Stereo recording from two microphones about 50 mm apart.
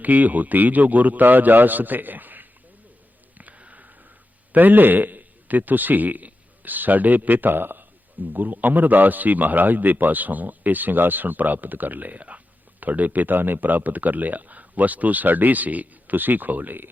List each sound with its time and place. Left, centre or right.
0.0 s speech: right
3.3 s a sound: right
4.5 s a man's voice: right